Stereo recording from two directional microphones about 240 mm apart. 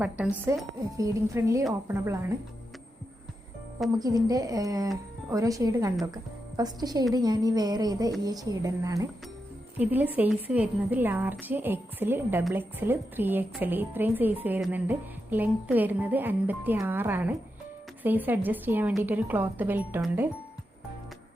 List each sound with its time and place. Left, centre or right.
0.0 s a woman's voice: centre
3.9 s a woman's voice: centre